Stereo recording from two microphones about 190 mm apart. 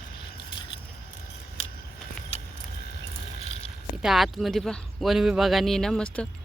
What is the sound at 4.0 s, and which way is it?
Speech, centre (ahead or behind).